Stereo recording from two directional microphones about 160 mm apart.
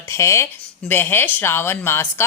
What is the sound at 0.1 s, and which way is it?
Speech, 20° left (ahead or behind).